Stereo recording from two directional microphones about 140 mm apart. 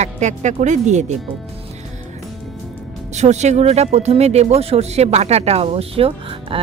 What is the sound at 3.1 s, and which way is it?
Speech, 55° right (ahead or behind).